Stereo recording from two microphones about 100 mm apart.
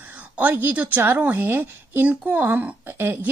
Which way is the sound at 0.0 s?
15° right (ahead or behind).